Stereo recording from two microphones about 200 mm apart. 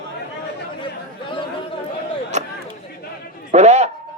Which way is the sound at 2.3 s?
35° right (ahead or behind).